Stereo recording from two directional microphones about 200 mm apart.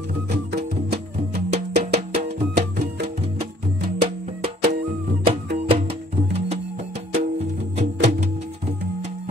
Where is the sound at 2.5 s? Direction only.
55° right (ahead or behind).